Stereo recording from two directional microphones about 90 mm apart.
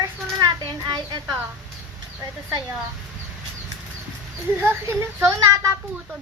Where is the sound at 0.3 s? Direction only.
50° right (ahead or behind).